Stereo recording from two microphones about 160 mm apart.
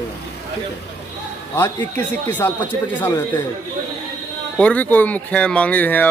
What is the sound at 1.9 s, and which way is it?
Speech, 10° left (ahead or behind).